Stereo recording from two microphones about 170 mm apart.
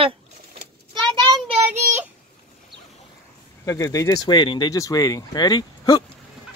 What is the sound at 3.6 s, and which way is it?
Speech, 20° left (ahead or behind).